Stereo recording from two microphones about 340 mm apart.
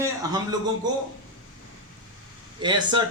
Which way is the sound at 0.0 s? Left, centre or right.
Centre.